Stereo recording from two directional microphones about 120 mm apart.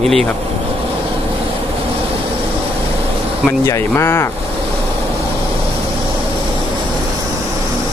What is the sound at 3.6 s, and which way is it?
Speech, 25° left (ahead or behind).